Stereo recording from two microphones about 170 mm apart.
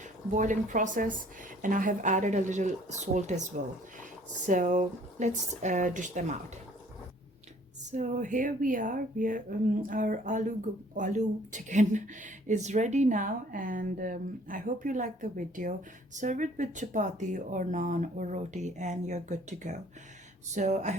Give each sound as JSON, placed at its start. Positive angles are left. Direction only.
{"t": 0.3, "sound": "speech", "side_deg": -50}
{"t": 7.9, "sound": "speech", "side_deg": -45}